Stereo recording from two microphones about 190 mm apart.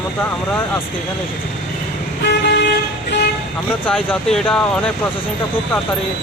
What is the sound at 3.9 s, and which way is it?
Speech, 5° left (ahead or behind).